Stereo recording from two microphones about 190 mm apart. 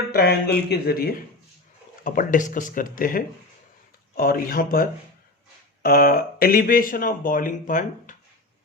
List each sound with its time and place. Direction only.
0.1 s speech: 55° left (ahead or behind)